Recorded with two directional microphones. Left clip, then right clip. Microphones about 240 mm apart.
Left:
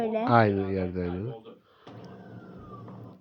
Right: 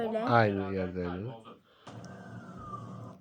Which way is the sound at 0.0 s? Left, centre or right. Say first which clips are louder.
Left 4 dB; centre.